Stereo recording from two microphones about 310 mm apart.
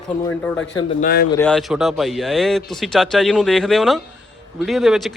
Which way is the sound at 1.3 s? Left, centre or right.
Centre.